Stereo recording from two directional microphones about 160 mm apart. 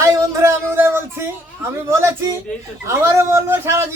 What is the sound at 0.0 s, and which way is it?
Music, 20° right (ahead or behind).